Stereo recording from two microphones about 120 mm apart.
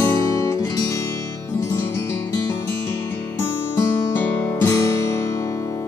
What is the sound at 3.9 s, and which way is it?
Music, 20° left (ahead or behind).